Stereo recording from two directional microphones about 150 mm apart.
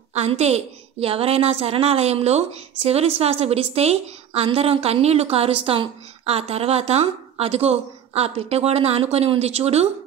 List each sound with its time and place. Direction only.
0.1 s a woman's voice: 45° right (ahead or behind)